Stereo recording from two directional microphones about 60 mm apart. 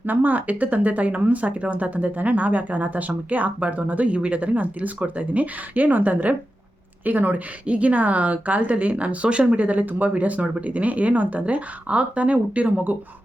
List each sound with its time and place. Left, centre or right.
0.0 s speech: right